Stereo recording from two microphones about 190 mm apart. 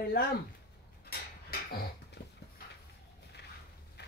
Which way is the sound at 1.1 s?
55° left (ahead or behind).